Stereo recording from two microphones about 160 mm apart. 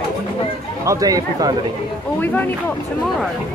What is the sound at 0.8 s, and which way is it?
Speech, 20° right (ahead or behind).